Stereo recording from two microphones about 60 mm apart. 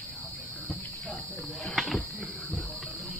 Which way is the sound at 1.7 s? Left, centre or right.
Centre.